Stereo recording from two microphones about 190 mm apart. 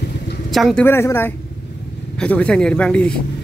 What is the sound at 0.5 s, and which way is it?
A man's voice, centre (ahead or behind).